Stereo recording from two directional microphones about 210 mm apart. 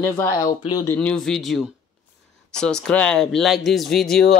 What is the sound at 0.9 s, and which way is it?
Speech, 5° left (ahead or behind).